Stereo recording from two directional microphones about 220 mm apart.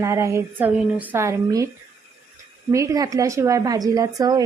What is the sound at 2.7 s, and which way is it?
Speech, 15° right (ahead or behind).